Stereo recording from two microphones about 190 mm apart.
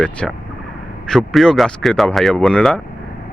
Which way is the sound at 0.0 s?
5° left (ahead or behind).